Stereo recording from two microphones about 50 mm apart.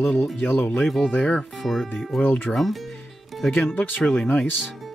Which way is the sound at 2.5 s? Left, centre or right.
Centre.